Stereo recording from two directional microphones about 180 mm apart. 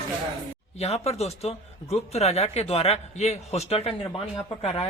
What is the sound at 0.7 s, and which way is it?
Speech, 35° left (ahead or behind).